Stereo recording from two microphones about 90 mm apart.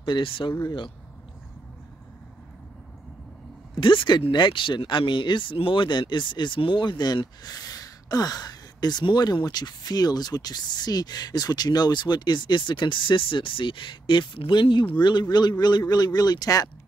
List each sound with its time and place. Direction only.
0.0 s speech: 65° left (ahead or behind)
3.8 s speech: 65° left (ahead or behind); by 16.7 s 45° left (ahead or behind)